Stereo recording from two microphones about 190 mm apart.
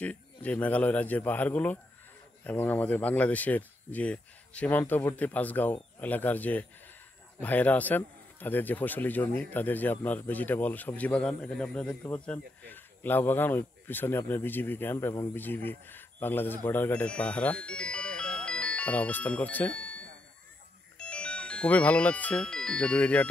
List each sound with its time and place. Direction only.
0.0 s a man's voice: 10° left (ahead or behind)